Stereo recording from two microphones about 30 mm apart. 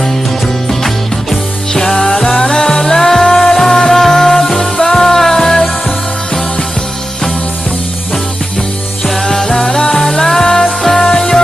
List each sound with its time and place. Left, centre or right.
0.7 s music: centre
9.2 s music: centre